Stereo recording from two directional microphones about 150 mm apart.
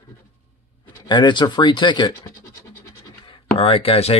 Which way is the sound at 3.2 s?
35° left (ahead or behind).